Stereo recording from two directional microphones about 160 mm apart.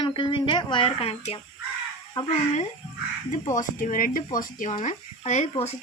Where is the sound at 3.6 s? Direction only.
55° left (ahead or behind).